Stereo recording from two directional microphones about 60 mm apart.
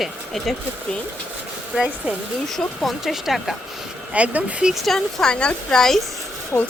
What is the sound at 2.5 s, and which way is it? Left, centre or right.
Speech, centre.